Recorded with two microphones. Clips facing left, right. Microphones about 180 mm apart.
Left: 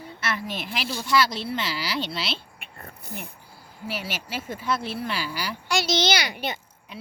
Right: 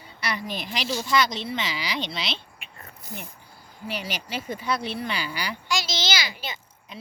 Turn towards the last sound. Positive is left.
turn(degrees=60)  # may be behind; listen again after turning